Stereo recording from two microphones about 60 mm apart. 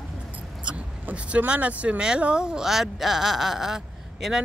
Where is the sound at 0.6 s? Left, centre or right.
Right.